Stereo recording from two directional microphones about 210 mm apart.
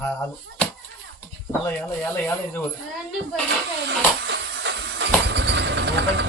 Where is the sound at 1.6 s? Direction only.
10° left (ahead or behind).